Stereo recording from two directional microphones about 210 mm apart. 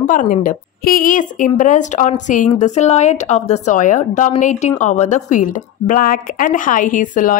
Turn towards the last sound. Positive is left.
turn(degrees=40)  # may be behind; listen again after turning